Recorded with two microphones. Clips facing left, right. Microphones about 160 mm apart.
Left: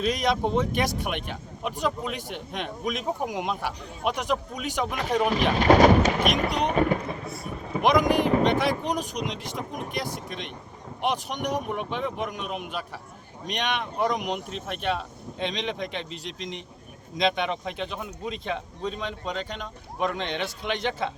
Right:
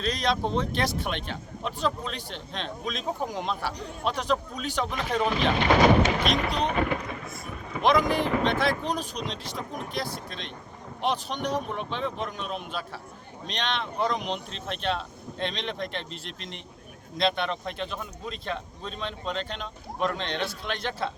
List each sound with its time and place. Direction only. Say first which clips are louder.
0.0 s speech: left 2 dB; 15° left (ahead or behind)
5.5 s speech: left 3 dB; 40° left (ahead or behind)
7.8 s speech: left 2 dB; 15° left (ahead or behind)
16.0 s a man's voice: left 4 dB; 60° right (ahead or behind)
17.2 s speech: left 1 dB; 15° left (ahead or behind)